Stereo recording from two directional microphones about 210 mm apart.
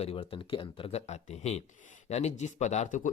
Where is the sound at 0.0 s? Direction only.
30° left (ahead or behind).